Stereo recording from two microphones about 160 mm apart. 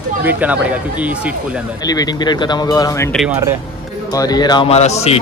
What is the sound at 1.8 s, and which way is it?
Speech, 25° left (ahead or behind).